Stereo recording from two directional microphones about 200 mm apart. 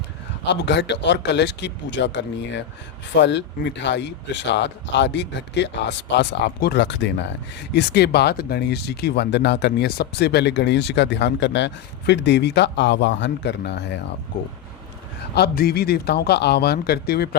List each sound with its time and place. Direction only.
0.4 s speech: 60° left (ahead or behind)
15.4 s a man's voice: 50° left (ahead or behind)